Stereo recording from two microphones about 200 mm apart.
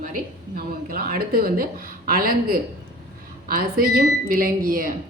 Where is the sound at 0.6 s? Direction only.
50° right (ahead or behind).